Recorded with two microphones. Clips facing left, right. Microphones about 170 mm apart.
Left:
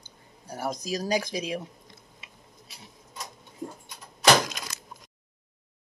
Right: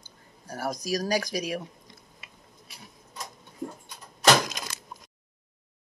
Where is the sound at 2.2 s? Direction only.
20° left (ahead or behind).